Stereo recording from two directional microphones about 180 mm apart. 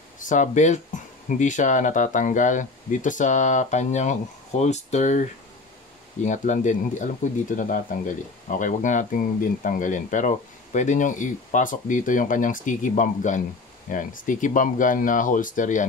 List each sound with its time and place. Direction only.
0.2 s speech: 45° left (ahead or behind)